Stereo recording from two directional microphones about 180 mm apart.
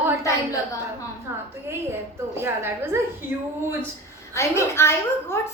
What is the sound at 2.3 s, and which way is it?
Speech, 15° right (ahead or behind).